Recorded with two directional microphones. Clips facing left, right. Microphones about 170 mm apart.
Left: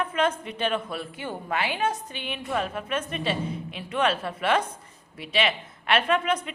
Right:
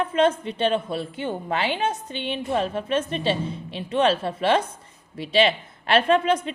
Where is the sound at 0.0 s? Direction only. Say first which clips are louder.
Right 5 dB; 30° right (ahead or behind).